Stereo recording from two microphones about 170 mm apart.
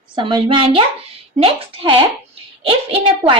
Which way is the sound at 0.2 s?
30° right (ahead or behind).